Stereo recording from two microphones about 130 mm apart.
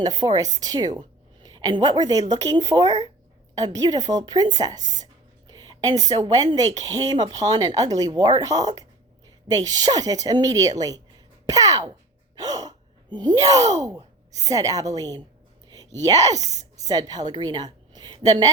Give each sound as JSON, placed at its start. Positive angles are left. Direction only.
{"t": 0.0, "sound": "a woman's voice", "side_deg": -30}
{"t": 5.5, "sound": "a sound", "side_deg": -30}
{"t": 6.4, "sound": "speech", "side_deg": -30}
{"t": 12.4, "sound": "sigh", "side_deg": -30}
{"t": 16.0, "sound": "a woman's voice", "side_deg": -25}
{"t": 17.9, "sound": "a sound", "side_deg": -35}